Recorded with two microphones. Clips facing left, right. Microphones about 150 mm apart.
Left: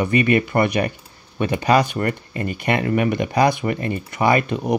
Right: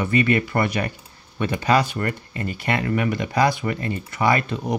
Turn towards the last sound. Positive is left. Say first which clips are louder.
# left 3 dB
turn(degrees=15)  # may be behind; listen again after turning